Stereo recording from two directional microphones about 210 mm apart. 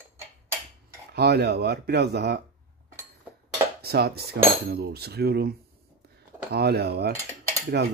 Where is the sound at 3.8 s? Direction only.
50° right (ahead or behind).